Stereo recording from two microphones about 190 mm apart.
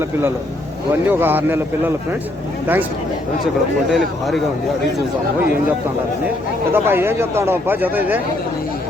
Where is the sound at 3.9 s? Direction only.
Centre (ahead or behind).